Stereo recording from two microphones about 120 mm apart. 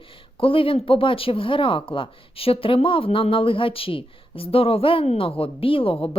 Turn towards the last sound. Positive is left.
turn(degrees=50)  # may be behind; listen again after turning